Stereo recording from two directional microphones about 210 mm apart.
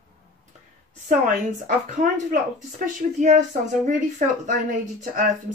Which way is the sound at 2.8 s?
35° right (ahead or behind).